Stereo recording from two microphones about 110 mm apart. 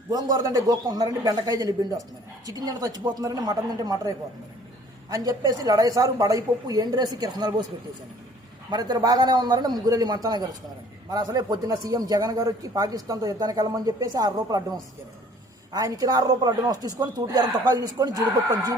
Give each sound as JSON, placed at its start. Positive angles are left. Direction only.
{"t": 0.1, "sound": "a man's voice", "side_deg": -30}
{"t": 8.7, "sound": "a man's voice", "side_deg": -40}